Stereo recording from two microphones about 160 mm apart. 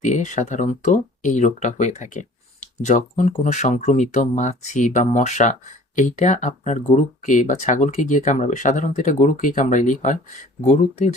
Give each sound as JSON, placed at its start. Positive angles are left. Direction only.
{"t": 0.0, "sound": "speech", "side_deg": 50}